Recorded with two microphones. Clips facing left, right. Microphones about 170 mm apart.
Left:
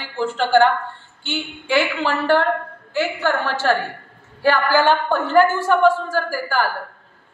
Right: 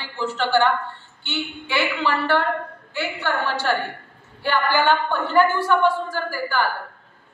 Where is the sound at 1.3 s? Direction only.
45° left (ahead or behind).